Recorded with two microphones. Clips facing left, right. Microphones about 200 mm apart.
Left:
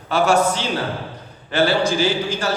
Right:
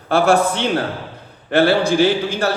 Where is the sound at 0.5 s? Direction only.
60° right (ahead or behind).